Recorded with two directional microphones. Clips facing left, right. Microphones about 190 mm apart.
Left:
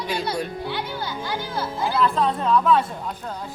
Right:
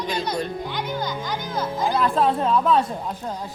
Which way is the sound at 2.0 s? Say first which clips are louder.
Even; 35° right (ahead or behind).